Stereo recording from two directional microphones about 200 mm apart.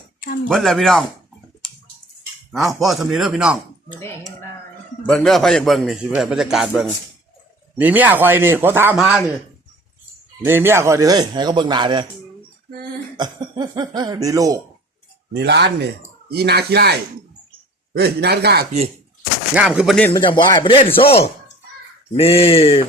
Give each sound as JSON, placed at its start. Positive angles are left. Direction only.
{"t": 0.4, "sound": "a man's voice", "side_deg": 0}
{"t": 2.5, "sound": "a man's voice", "side_deg": 0}
{"t": 5.0, "sound": "a man's voice", "side_deg": 0}
{"t": 10.4, "sound": "speech", "side_deg": -10}
{"t": 13.1, "sound": "speech", "side_deg": -20}
{"t": 15.3, "sound": "speech", "side_deg": -55}
{"t": 19.5, "sound": "a man's voice", "side_deg": -5}
{"t": 20.1, "sound": "speech", "side_deg": 20}